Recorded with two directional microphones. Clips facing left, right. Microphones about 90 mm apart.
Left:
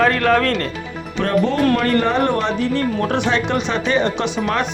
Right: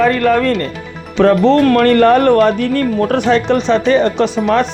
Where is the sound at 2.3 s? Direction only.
55° right (ahead or behind).